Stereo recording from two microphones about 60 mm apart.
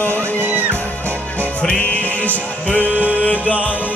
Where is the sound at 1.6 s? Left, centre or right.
Centre.